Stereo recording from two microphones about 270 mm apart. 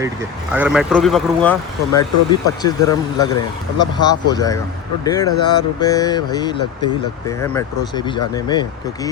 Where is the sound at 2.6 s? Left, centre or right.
Centre.